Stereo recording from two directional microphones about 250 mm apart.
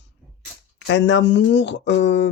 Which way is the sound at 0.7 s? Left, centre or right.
Left.